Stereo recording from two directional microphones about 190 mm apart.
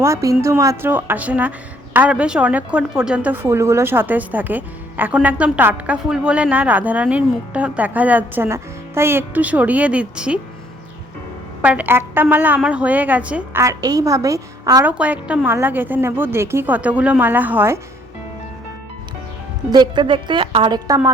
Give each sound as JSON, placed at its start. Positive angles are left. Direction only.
{"t": 0.0, "sound": "a woman's voice", "side_deg": -15}
{"t": 11.6, "sound": "a woman's voice", "side_deg": -10}
{"t": 14.8, "sound": "a woman's voice", "side_deg": -10}
{"t": 19.7, "sound": "a woman's voice", "side_deg": -25}